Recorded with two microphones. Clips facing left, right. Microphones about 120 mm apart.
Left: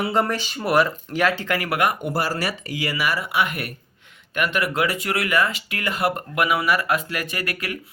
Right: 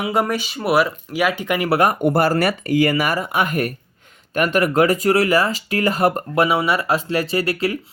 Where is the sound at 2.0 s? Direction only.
55° right (ahead or behind).